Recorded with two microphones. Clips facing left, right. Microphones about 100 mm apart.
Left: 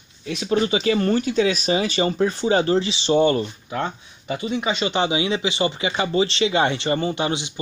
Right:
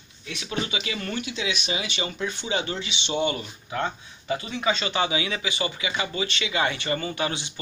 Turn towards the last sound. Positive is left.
turn(degrees=20)  # may be behind; listen again after turning